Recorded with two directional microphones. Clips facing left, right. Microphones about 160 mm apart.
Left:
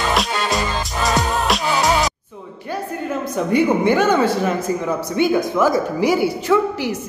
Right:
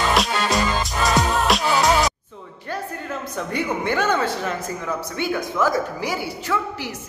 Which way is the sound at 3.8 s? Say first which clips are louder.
Left 6 dB; 10° left (ahead or behind).